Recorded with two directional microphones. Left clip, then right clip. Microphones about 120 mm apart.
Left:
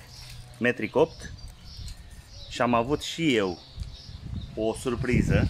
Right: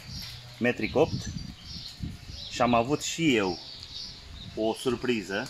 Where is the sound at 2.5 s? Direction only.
5° right (ahead or behind).